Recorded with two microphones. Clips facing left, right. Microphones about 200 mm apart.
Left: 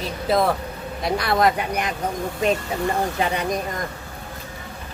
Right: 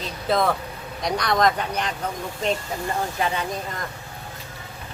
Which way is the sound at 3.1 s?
15° left (ahead or behind).